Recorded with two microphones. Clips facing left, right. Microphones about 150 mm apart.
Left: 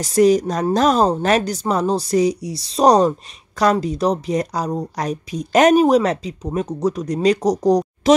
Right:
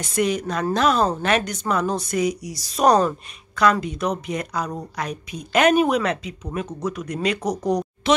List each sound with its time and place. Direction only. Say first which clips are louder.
0.0 s a woman's voice: left 8 dB; 35° left (ahead or behind)